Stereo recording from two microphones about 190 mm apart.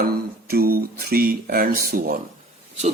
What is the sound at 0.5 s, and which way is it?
Speech, 55° right (ahead or behind).